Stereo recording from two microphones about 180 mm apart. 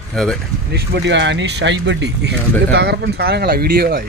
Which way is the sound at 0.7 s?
80° right.